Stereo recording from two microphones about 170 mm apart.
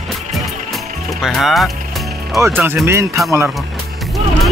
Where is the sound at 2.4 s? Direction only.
10° right (ahead or behind).